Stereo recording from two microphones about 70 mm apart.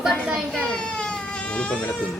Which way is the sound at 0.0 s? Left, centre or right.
Centre.